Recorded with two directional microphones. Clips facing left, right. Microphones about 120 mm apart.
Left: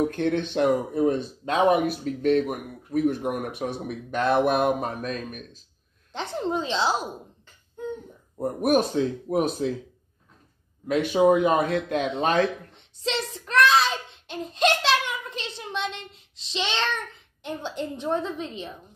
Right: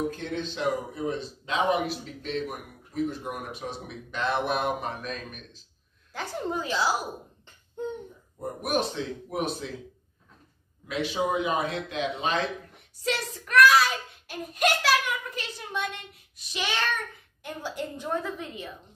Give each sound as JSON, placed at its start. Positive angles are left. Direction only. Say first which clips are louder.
{"t": 0.1, "sound": "speech", "louder": "left 8 dB", "side_deg": 60}
{"t": 6.1, "sound": "speech", "louder": "left 4 dB", "side_deg": 25}
{"t": 8.6, "sound": "speech", "louder": "left 7 dB", "side_deg": 45}
{"t": 10.9, "sound": "speech", "louder": "left 8 dB", "side_deg": 50}
{"t": 12.7, "sound": "a child's voice", "louder": "left 2 dB", "side_deg": 25}